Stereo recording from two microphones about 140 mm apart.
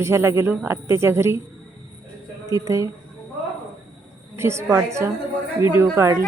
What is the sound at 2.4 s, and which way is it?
Speech, 20° right (ahead or behind).